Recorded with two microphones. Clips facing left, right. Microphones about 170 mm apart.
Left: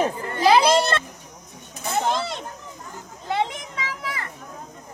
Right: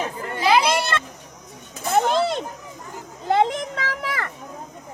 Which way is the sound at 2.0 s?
55° right (ahead or behind).